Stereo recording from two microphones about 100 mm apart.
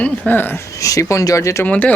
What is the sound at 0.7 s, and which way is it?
Speech, 35° left (ahead or behind).